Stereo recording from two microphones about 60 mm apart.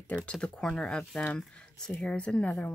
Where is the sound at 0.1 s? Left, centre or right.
Centre.